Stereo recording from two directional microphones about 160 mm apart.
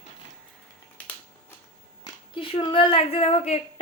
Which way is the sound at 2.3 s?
30° left (ahead or behind).